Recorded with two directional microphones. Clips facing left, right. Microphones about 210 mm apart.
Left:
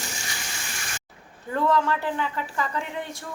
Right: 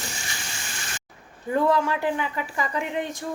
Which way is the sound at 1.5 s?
15° right (ahead or behind).